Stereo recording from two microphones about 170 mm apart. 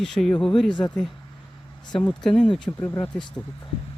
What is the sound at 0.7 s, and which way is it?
Speech, 25° left (ahead or behind).